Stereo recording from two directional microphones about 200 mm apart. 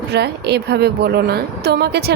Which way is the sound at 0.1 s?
55° right (ahead or behind).